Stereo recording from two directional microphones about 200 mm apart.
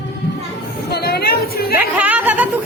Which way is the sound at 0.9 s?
50° left (ahead or behind).